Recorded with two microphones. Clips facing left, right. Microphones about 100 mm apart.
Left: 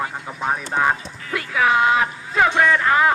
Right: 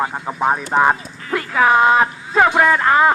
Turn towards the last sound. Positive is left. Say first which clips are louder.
# right 3 dB
turn(degrees=-40)  # may be behind; listen again after turning